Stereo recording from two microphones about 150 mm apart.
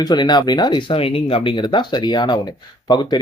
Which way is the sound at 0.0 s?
30° left (ahead or behind).